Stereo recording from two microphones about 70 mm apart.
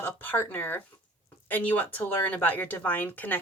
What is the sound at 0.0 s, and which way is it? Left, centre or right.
Speech, left.